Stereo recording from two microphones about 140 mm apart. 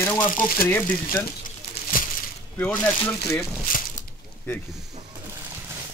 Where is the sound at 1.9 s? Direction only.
80° left.